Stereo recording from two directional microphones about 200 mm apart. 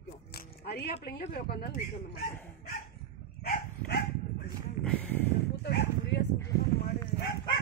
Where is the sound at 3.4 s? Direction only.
50° left (ahead or behind).